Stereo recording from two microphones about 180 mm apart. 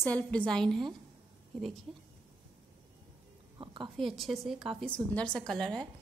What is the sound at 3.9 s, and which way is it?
A woman's voice, centre (ahead or behind).